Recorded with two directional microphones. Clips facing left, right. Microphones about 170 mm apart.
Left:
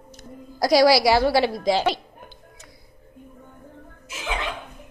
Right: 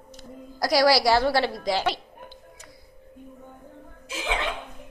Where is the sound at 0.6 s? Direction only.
20° left (ahead or behind).